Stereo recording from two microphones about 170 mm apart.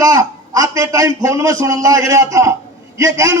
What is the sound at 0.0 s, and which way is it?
A man's voice, 20° right (ahead or behind).